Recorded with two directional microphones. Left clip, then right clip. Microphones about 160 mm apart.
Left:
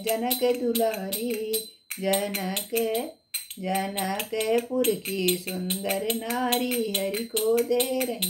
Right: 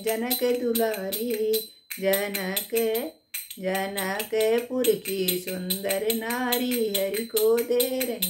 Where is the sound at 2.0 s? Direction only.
25° right (ahead or behind).